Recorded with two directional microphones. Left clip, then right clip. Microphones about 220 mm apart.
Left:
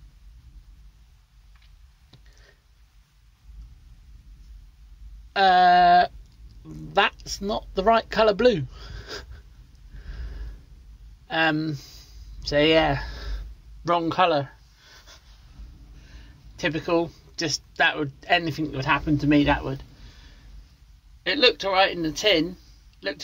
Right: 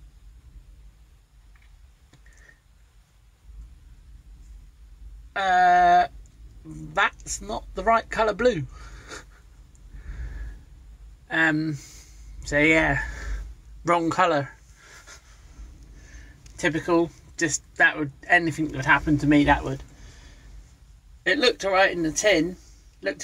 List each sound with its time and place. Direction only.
5.3 s a sound: 15° left (ahead or behind)
6.9 s speech: 15° left (ahead or behind)
11.2 s speech: 15° left (ahead or behind); by 14.5 s centre (ahead or behind)
16.5 s speech: 5° left (ahead or behind)
21.2 s speech: centre (ahead or behind)
22.9 s a sound: centre (ahead or behind)